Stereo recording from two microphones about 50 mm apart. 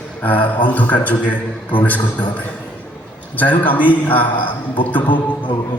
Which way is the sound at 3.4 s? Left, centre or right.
Left.